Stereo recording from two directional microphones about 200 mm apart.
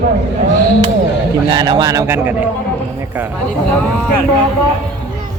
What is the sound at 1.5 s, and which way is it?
Speech, 20° right (ahead or behind).